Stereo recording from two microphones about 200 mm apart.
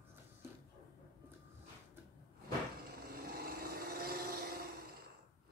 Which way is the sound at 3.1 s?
50° right (ahead or behind).